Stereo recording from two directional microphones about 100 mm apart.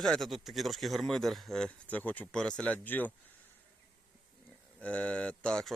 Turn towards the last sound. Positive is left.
turn(degrees=10)  # may be behind; listen again after turning